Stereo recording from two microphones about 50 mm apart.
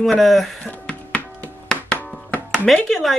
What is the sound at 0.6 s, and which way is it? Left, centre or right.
Music, left.